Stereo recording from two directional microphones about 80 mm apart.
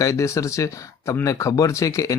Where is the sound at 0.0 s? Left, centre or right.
Left.